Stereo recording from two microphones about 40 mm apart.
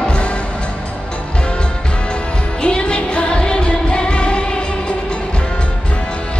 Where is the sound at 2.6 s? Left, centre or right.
Left.